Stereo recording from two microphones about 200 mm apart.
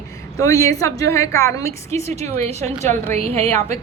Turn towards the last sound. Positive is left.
turn(degrees=-30)  # may be behind; listen again after turning